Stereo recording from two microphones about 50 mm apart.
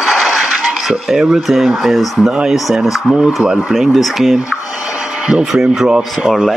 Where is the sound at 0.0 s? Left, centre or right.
Centre.